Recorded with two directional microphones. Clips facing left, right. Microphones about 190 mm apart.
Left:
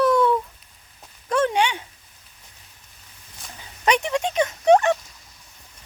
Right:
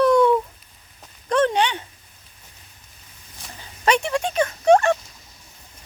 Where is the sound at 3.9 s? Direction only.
15° left (ahead or behind).